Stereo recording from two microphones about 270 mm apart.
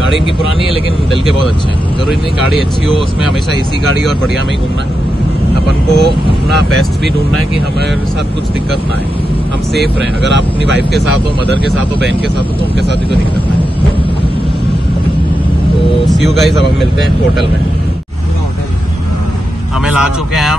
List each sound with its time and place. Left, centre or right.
5.9 s speech: right
9.8 s speech: right
16.1 s speech: centre
19.9 s speech: centre